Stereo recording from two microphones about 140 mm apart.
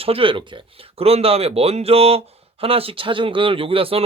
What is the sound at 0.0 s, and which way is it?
A man's voice, 40° right (ahead or behind).